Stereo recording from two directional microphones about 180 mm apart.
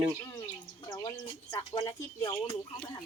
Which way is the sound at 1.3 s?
25° left (ahead or behind).